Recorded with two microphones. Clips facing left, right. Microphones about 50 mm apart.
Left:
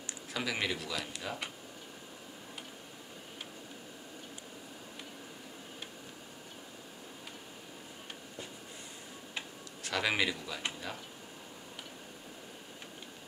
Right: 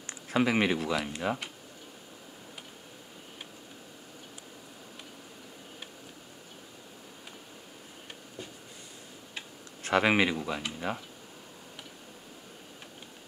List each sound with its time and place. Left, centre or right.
0.0 s speech: right
9.8 s speech: right